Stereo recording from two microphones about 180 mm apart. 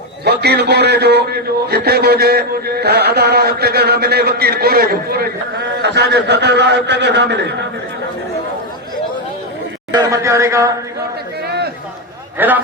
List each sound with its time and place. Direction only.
0.3 s a man's voice: 65° right (ahead or behind)
9.9 s a man's voice: 20° right (ahead or behind)
11.4 s a sound: 65° right (ahead or behind)
12.4 s a man's voice: 10° right (ahead or behind)